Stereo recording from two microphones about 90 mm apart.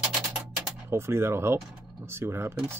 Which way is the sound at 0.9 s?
30° right (ahead or behind).